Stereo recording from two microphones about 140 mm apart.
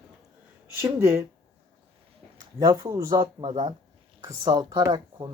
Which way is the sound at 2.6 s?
25° right (ahead or behind).